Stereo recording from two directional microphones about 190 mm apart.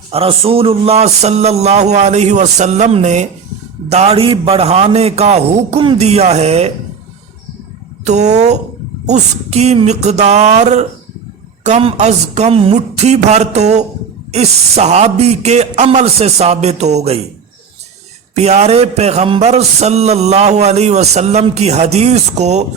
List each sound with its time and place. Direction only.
0.1 s a man's voice: 30° right (ahead or behind)
8.0 s a man's voice: 35° right (ahead or behind)
18.3 s a man's voice: 35° right (ahead or behind)